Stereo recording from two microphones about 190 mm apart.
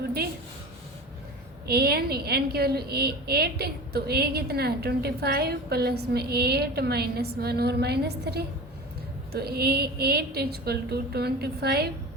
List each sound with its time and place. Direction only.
1.6 s a woman's voice: 55° right (ahead or behind)